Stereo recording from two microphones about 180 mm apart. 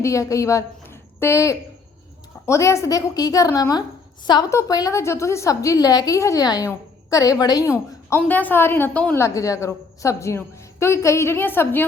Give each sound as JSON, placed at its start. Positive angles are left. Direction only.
{"t": 0.0, "sound": "a woman's voice", "side_deg": 15}